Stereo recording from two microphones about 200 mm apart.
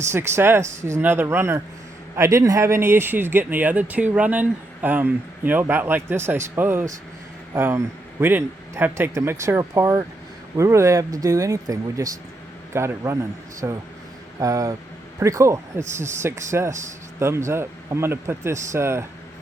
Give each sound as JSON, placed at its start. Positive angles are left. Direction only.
{"t": 0.1, "sound": "speech", "side_deg": -10}
{"t": 0.6, "sound": "speech", "side_deg": -35}
{"t": 0.9, "sound": "speech", "side_deg": -10}